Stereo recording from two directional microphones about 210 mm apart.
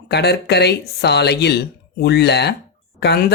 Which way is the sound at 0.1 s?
50° left (ahead or behind).